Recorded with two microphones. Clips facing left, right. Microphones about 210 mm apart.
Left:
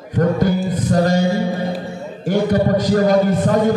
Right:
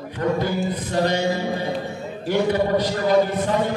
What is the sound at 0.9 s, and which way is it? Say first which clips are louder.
Mantra: left 5 dB; 45° left (ahead or behind).